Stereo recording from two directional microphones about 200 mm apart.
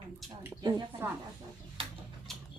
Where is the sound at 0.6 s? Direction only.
20° right (ahead or behind).